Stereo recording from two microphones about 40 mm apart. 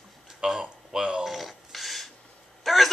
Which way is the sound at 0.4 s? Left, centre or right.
Centre.